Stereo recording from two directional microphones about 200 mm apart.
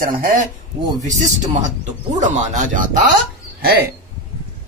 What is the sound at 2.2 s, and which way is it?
Speech, 35° right (ahead or behind).